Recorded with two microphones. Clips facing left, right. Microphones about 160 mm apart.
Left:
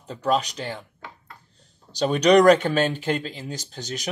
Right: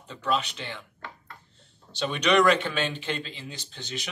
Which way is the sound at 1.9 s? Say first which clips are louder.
Left 7 dB; 40° left (ahead or behind).